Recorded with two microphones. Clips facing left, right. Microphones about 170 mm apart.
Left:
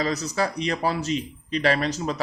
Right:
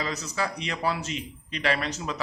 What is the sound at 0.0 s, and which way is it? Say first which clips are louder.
Speech: left 5 dB; 35° left (ahead or behind).